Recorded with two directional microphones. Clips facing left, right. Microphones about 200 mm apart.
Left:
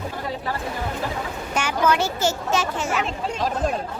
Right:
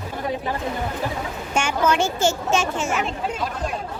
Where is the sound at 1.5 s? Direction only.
25° right (ahead or behind).